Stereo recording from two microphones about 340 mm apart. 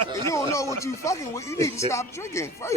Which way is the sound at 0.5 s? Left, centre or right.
Centre.